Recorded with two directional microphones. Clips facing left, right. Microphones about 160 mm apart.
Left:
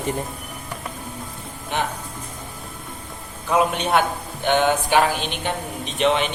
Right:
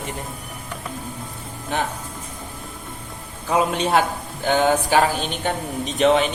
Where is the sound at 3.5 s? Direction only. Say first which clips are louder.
Even; 30° right (ahead or behind).